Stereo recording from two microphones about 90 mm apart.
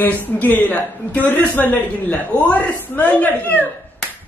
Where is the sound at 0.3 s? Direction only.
20° left (ahead or behind).